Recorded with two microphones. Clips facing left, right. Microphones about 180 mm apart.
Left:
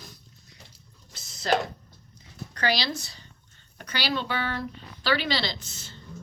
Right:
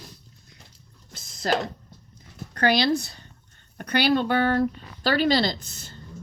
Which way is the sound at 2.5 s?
55° right (ahead or behind).